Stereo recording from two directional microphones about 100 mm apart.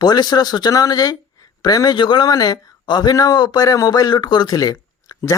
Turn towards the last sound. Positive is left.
turn(degrees=35)  # may be behind; listen again after turning